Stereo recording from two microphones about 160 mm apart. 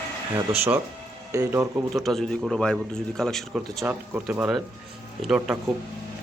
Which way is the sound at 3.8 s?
10° right (ahead or behind).